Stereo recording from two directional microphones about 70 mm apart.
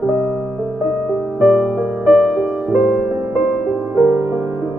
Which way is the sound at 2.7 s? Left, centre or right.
Centre.